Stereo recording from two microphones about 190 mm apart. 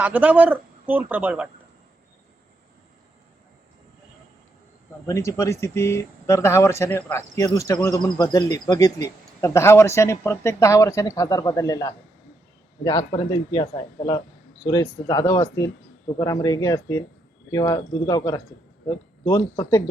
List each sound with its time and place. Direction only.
0.0 s a man's voice: 10° right (ahead or behind)
5.0 s a man's voice: 15° left (ahead or behind)